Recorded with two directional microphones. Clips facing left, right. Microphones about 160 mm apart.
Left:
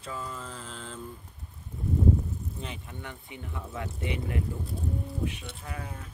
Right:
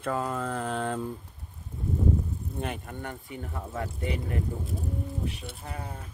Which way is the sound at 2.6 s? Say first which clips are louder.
Right 6 dB; 50° right (ahead or behind).